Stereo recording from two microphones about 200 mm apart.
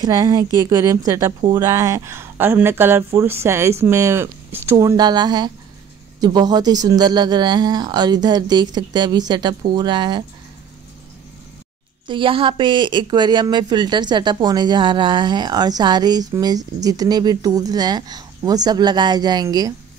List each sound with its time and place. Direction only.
0.0 s speech: 20° right (ahead or behind)
12.1 s speech: 25° right (ahead or behind)